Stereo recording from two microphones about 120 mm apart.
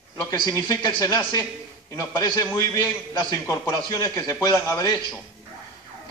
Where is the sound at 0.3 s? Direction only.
30° left (ahead or behind).